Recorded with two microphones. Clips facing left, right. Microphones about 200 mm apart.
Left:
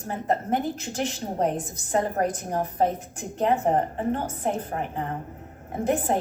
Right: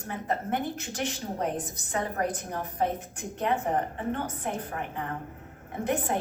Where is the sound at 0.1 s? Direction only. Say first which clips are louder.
Left 5 dB; 35° left (ahead or behind).